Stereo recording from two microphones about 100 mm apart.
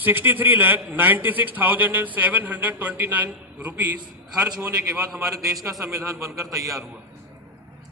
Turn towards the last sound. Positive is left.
turn(degrees=-30)  # may be behind; listen again after turning